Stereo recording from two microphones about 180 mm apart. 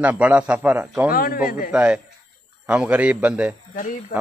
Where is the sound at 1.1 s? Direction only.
55° left (ahead or behind).